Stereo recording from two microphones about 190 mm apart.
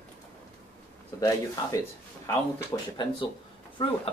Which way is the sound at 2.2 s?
20° left (ahead or behind).